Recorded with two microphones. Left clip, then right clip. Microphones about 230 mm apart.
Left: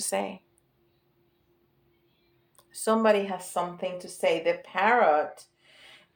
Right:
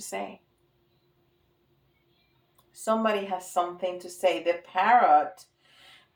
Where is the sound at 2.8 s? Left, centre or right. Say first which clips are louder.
Left 3 dB; left.